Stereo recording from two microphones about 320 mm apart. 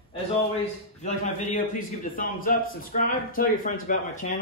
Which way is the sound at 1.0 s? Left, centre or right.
Left.